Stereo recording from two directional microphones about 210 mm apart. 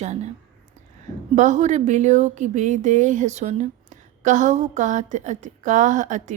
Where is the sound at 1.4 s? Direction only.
35° right (ahead or behind).